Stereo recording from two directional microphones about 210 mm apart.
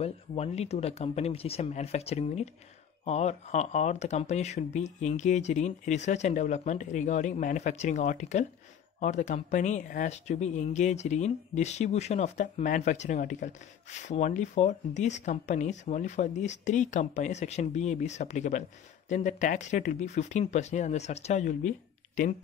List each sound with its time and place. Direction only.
0.0 s speech: 30° left (ahead or behind)